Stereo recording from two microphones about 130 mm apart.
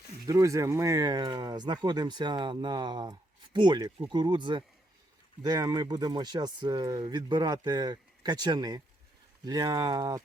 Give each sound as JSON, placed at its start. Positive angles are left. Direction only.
{"t": 0.3, "sound": "speech", "side_deg": -25}